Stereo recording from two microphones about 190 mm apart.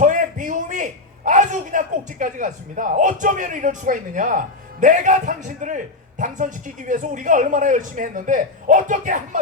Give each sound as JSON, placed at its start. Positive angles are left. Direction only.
{"t": 0.0, "sound": "a man's voice", "side_deg": -40}